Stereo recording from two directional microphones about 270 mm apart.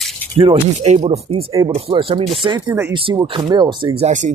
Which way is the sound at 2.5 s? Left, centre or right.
Centre.